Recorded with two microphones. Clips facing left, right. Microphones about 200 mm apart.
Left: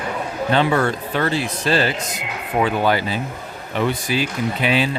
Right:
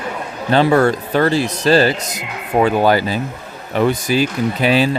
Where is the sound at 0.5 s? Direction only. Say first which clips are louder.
Right 6 dB; 40° right (ahead or behind).